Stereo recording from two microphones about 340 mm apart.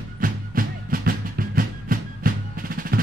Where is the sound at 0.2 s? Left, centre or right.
Right.